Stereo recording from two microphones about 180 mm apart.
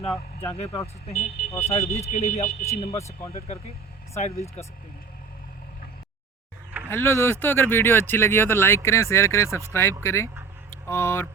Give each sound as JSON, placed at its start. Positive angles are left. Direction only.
{"t": 0.0, "sound": "speech", "side_deg": 35}
{"t": 2.9, "sound": "speech", "side_deg": 15}
{"t": 3.3, "sound": "speech", "side_deg": 35}
{"t": 6.9, "sound": "speech", "side_deg": 15}